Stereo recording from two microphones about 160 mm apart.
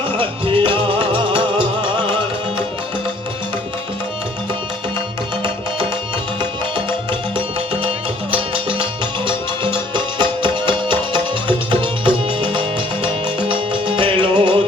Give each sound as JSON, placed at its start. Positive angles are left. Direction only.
{"t": 0.2, "sound": "music", "side_deg": -30}
{"t": 6.4, "sound": "music", "side_deg": -30}
{"t": 9.9, "sound": "music", "side_deg": -30}